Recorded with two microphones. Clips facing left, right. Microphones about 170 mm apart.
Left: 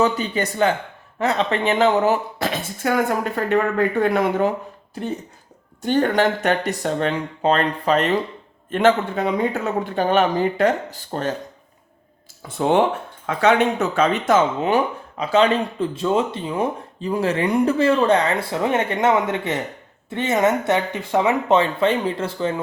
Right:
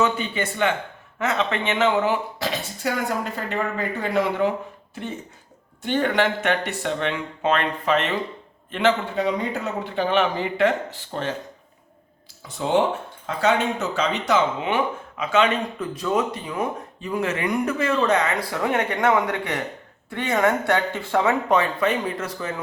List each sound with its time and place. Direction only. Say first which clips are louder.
0.0 s speech: left 3 dB; 40° left (ahead or behind)
5.8 s speech: left 3 dB; 40° left (ahead or behind)
12.5 s speech: left 3 dB; 55° left (ahead or behind); by 22.5 s 30° left (ahead or behind)